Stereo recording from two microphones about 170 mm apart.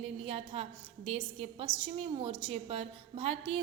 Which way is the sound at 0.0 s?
35° right (ahead or behind).